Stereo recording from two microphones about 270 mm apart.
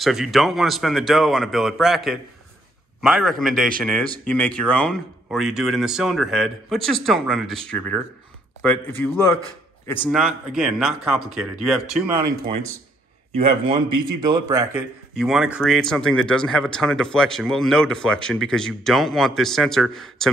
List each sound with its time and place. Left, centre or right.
0.0 s a man's voice: centre
13.3 s a man's voice: centre